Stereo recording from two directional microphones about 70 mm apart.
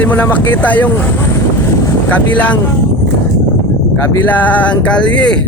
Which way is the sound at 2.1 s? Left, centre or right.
Left.